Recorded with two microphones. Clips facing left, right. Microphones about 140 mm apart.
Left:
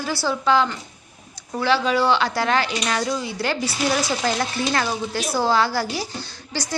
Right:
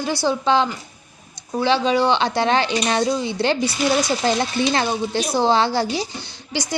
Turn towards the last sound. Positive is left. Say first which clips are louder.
# right 3 dB
turn(degrees=-15)  # may be behind; listen again after turning